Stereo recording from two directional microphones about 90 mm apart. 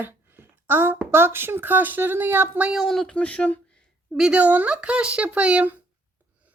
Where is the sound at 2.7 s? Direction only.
5° left (ahead or behind).